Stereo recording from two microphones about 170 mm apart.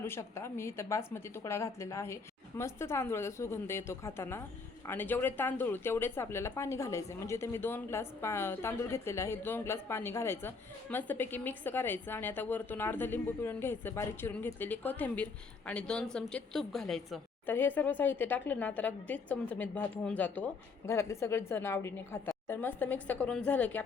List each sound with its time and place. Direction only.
0.0 s a woman's voice: 15° left (ahead or behind)